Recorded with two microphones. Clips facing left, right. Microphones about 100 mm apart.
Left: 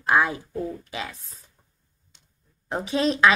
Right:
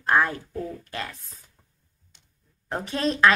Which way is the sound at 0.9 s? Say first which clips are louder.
Left 1 dB; 5° left (ahead or behind).